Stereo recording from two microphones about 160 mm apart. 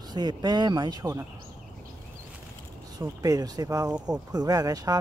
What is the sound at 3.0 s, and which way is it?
Speech, 25° right (ahead or behind).